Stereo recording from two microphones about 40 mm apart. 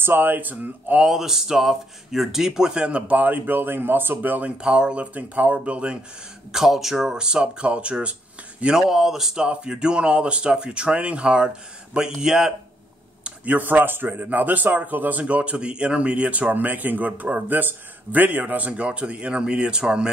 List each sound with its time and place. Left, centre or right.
0.0 s speech: right
1.0 s speech: centre
2.7 s speech: right
3.1 s speech: right
4.6 s speech: right
5.1 s speech: right
6.5 s speech: centre
7.2 s speech: right
8.7 s speech: centre
9.5 s speech: right
13.6 s speech: right
16.5 s speech: right